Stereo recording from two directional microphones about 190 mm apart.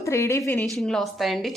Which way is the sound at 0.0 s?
15° left (ahead or behind).